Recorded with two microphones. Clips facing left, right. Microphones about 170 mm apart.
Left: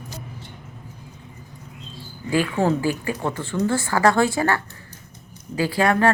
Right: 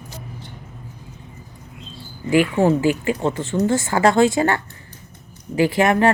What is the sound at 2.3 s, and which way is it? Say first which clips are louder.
A woman's voice: right 4 dB; 15° right (ahead or behind).